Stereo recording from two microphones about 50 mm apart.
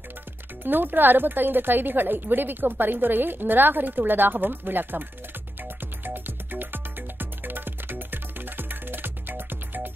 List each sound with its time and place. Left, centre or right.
0.7 s a woman's voice: right
5.6 s music: right